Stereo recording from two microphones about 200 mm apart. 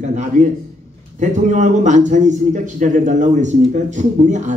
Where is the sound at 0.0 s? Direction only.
35° right (ahead or behind).